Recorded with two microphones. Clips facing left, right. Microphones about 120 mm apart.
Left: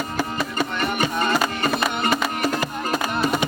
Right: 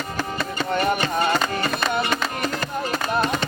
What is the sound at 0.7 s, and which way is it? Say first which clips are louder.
Music: right 4 dB; 40° right (ahead or behind).